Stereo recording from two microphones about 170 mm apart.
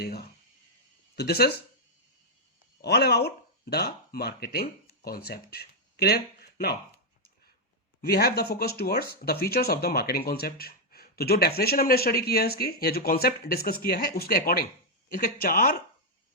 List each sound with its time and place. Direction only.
0.0 s speech: 65° left (ahead or behind)
2.8 s speech: 75° left (ahead or behind)
8.0 s speech: 65° left (ahead or behind)